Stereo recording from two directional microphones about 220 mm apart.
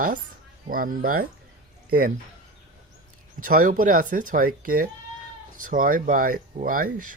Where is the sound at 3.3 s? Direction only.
40° right (ahead or behind).